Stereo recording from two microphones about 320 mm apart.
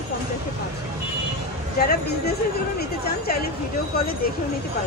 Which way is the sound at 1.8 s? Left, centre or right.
Left.